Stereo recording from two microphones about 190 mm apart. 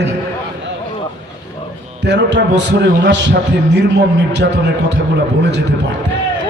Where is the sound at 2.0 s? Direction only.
70° right (ahead or behind).